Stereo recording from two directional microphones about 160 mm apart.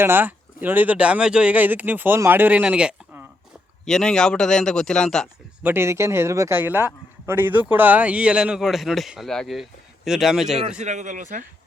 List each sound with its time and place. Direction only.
0.0 s speech: 15° right (ahead or behind)
3.8 s speech: 5° left (ahead or behind)
5.6 s speech: 15° right (ahead or behind)
10.8 s speech: 45° right (ahead or behind)